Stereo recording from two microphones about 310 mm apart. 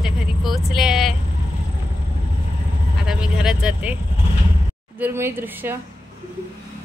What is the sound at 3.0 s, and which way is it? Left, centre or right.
Vehicle, centre.